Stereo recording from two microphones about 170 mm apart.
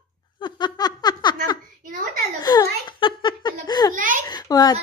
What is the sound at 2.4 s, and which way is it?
Giggle, 25° left (ahead or behind).